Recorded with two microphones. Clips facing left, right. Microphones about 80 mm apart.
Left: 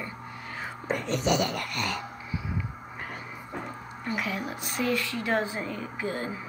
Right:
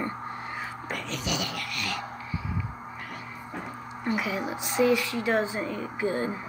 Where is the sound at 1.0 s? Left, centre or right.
Left.